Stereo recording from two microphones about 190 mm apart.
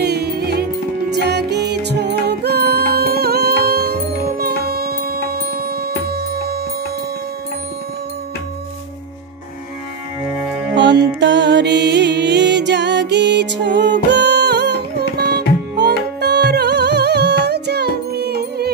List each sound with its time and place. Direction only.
0.0 s music: 60° right (ahead or behind)
10.7 s music: 65° right (ahead or behind)